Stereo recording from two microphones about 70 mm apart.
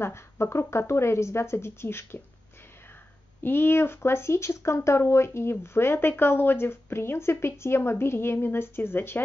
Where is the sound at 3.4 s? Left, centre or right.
Left.